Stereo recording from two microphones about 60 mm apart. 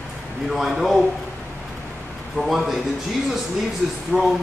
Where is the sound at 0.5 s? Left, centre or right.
Centre.